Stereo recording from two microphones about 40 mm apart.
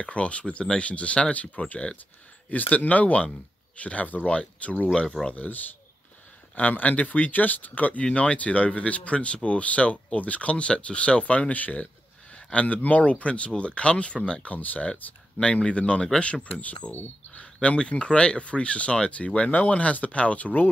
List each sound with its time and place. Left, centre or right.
0.0 s speech: left
2.5 s speech: left
5.3 s speech: left
8.0 s speech: left
14.5 s speech: left
14.9 s speech: left